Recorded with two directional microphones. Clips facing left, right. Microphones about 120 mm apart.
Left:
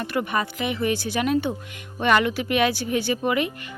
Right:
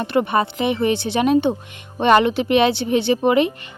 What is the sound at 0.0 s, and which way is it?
Speech, 25° right (ahead or behind).